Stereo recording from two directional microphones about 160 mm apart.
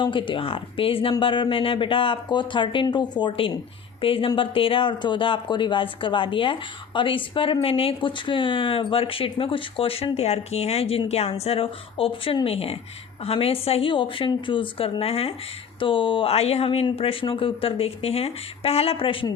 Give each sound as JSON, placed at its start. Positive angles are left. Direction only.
{"t": 0.0, "sound": "speech", "side_deg": 30}